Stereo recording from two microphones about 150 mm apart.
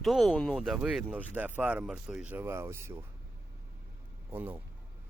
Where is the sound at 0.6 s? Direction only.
5° right (ahead or behind).